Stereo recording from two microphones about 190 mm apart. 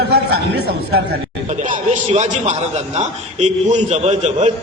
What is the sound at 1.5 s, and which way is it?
A man's voice, 40° right (ahead or behind).